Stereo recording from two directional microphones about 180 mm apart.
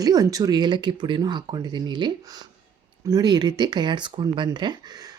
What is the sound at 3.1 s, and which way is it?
Speech, 25° right (ahead or behind).